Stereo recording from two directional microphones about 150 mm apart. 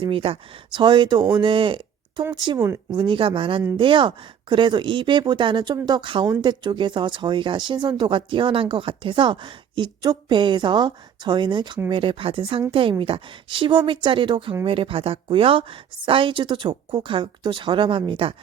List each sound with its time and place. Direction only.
0.0 s speech: 40° right (ahead or behind)